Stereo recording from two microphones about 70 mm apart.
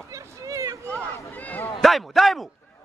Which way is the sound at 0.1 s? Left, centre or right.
Right.